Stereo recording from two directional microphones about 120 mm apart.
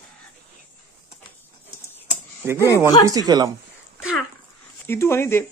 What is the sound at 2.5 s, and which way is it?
Speech, 25° left (ahead or behind).